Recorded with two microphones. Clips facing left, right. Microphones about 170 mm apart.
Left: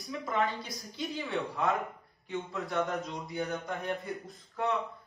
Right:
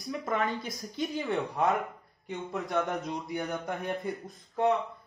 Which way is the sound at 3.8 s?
20° right (ahead or behind).